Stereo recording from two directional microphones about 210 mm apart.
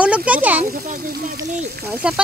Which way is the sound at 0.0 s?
5° right (ahead or behind).